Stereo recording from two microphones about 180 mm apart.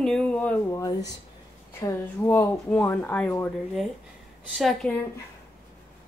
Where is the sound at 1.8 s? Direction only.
15° left (ahead or behind).